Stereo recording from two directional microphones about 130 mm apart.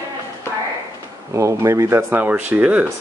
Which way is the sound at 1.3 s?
25° right (ahead or behind).